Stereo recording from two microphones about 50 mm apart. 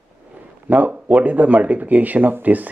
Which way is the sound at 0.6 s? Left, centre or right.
Right.